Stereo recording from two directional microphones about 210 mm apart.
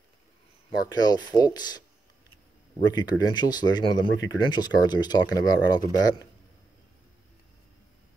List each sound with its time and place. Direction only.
0.8 s speech: 20° left (ahead or behind)
2.9 s speech: 20° left (ahead or behind)